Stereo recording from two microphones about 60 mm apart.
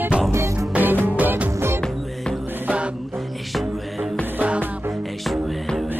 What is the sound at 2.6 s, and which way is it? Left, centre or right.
Music, right.